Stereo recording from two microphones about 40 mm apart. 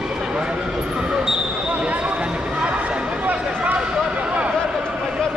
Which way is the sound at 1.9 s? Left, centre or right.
Right.